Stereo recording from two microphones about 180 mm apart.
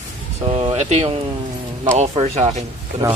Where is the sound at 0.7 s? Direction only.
35° right (ahead or behind).